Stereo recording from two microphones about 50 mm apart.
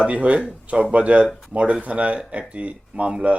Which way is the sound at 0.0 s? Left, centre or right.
Right.